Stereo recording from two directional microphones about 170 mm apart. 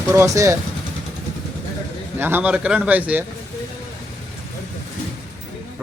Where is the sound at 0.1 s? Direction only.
15° right (ahead or behind).